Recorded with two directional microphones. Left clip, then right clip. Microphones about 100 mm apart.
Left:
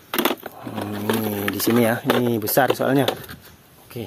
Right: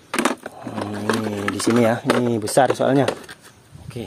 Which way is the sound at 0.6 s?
5° right (ahead or behind).